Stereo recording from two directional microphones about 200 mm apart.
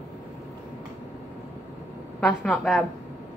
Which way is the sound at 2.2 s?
5° left (ahead or behind).